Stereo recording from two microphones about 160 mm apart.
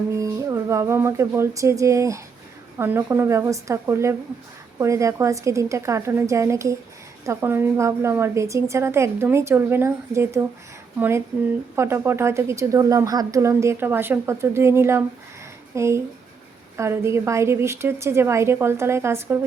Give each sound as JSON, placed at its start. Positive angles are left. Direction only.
{"t": 0.1, "sound": "a woman's voice", "side_deg": -20}
{"t": 11.8, "sound": "a woman's voice", "side_deg": -15}